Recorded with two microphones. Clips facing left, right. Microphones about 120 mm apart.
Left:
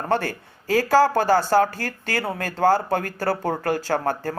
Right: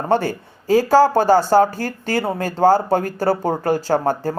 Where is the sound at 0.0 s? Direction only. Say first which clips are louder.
Right 5 dB; 20° right (ahead or behind).